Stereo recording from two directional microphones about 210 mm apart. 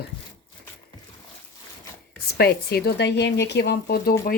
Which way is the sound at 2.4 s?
50° left (ahead or behind).